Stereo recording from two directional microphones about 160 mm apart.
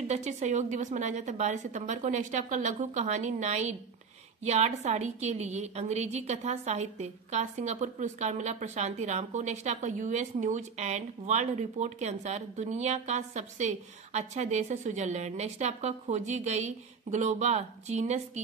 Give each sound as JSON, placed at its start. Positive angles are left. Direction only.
{"t": 0.1, "sound": "speech", "side_deg": -45}